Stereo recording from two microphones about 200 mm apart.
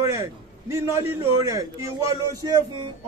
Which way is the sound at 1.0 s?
90° right.